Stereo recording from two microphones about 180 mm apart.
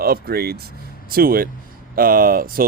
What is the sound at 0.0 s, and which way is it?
Speech, 55° right (ahead or behind).